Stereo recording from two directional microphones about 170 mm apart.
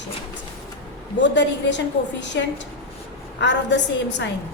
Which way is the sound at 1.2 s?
90° left.